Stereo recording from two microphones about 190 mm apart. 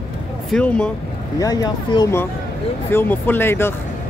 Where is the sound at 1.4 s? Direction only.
20° left (ahead or behind).